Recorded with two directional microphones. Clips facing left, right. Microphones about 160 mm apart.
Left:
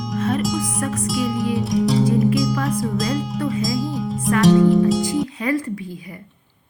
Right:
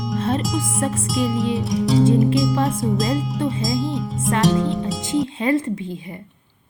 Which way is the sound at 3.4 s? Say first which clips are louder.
Even; 25° right (ahead or behind).